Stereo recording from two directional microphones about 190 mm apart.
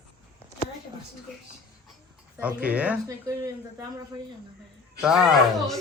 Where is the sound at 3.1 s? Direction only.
15° right (ahead or behind).